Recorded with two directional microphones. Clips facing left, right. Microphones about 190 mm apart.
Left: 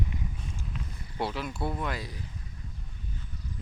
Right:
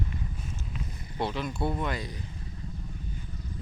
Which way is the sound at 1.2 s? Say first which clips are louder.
Right 2 dB; 5° left (ahead or behind).